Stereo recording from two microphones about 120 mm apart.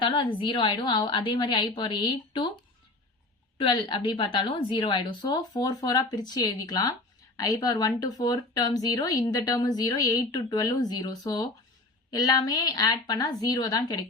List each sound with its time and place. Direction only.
0.0 s a woman's voice: 40° left (ahead or behind)
3.6 s speech: 45° left (ahead or behind)